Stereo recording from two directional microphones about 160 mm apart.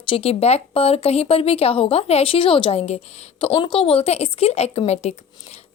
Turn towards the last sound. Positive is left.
turn(degrees=45)  # may be behind; listen again after turning